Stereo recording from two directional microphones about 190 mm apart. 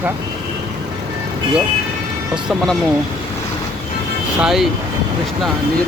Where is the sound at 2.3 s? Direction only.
5° right (ahead or behind).